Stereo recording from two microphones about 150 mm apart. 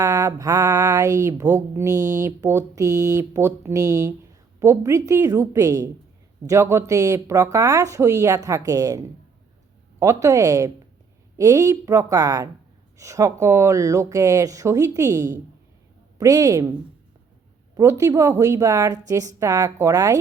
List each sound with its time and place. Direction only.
0.0 s speech: 25° right (ahead or behind)
17.7 s speech: 20° right (ahead or behind)